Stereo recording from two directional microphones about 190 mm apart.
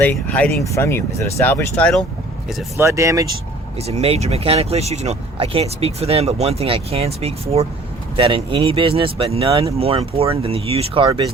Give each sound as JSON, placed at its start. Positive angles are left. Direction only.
{"t": 0.0, "sound": "speech", "side_deg": 10}
{"t": 2.7, "sound": "speech", "side_deg": -15}
{"t": 3.8, "sound": "speech", "side_deg": -35}